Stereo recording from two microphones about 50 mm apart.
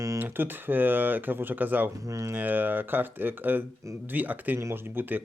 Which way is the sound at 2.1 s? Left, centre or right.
Right.